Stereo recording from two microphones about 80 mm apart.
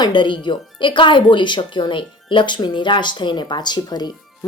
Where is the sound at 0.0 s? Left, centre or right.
Left.